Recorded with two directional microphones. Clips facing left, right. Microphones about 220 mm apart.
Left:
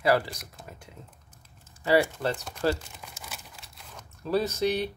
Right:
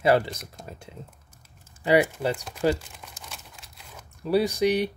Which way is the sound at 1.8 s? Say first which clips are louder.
Right 2 dB; 20° right (ahead or behind).